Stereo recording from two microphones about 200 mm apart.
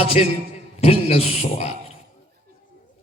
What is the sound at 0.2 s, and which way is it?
Music, 35° left (ahead or behind).